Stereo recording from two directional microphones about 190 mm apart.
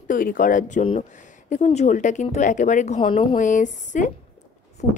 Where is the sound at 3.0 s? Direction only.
25° left (ahead or behind).